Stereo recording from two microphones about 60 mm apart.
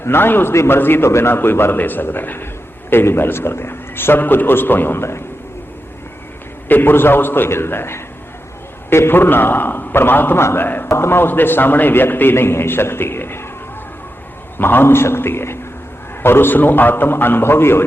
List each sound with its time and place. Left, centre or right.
0.0 s a man's voice: left
6.7 s a man's voice: left
14.6 s a man's voice: left